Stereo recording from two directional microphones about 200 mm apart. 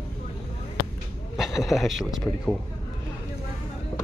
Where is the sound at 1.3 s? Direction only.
Centre (ahead or behind).